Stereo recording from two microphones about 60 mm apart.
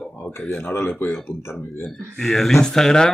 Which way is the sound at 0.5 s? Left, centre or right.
Left.